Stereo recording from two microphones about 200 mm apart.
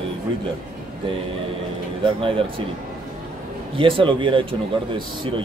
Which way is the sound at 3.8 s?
25° right (ahead or behind).